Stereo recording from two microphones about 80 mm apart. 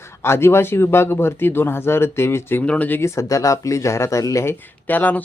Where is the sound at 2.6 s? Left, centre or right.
Centre.